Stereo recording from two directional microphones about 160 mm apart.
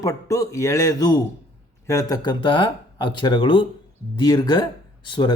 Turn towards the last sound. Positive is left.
turn(degrees=30)  # may be behind; listen again after turning